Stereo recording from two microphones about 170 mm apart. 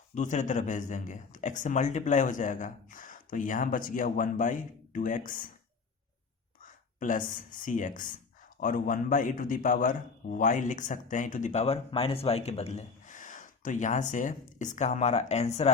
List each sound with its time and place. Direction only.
0.1 s a man's voice: 45° left (ahead or behind)
6.6 s a man's voice: 50° left (ahead or behind)